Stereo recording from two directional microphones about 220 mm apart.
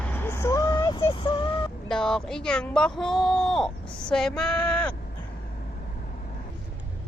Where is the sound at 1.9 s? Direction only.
5° left (ahead or behind).